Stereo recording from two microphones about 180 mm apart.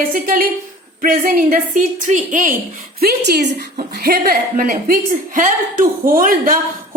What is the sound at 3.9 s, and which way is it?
A woman's voice, 55° right (ahead or behind).